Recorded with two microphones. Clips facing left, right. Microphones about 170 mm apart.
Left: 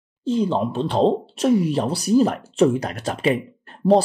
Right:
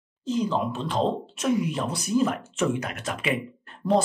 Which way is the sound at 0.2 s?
30° left (ahead or behind).